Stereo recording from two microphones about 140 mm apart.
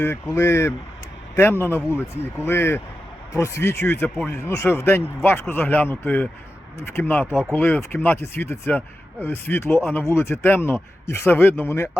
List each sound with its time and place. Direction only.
0.3 s a man's voice: 20° left (ahead or behind)